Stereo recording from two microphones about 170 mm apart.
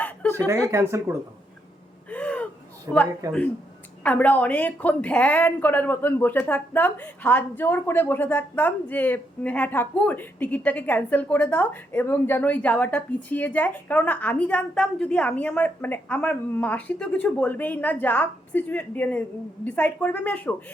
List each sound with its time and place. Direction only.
0.0 s a sound: 10° left (ahead or behind)
0.7 s speech: 15° right (ahead or behind)
2.0 s gasp: 10° left (ahead or behind)
2.9 s speech: 15° right (ahead or behind)
4.0 s a woman's voice: 10° left (ahead or behind)